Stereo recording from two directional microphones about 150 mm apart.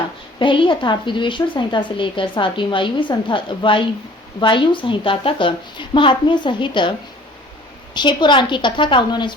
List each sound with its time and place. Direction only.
0.3 s a woman's voice: 35° left (ahead or behind)
7.9 s a woman's voice: 30° left (ahead or behind)